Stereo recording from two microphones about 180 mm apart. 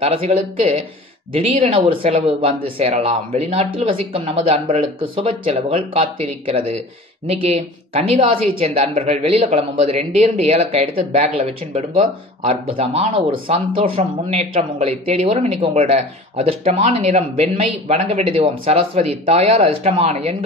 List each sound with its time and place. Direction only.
0.0 s a woman's voice: 35° right (ahead or behind)